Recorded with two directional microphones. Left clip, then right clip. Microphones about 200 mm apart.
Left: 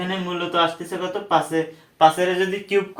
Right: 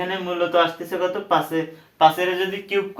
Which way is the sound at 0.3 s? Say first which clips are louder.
Right 2 dB; centre (ahead or behind).